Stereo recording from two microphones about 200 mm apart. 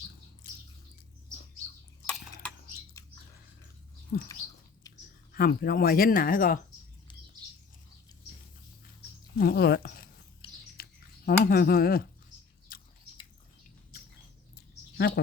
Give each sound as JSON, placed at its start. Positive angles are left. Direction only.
{"t": 4.1, "sound": "speech", "side_deg": 50}
{"t": 5.3, "sound": "speech", "side_deg": 50}
{"t": 9.4, "sound": "speech", "side_deg": 50}
{"t": 10.4, "sound": "squish", "side_deg": 25}
{"t": 10.8, "sound": "a sound", "side_deg": 50}
{"t": 11.3, "sound": "speech", "side_deg": 50}
{"t": 12.7, "sound": "drip", "side_deg": 45}
{"t": 14.9, "sound": "a woman's voice", "side_deg": 55}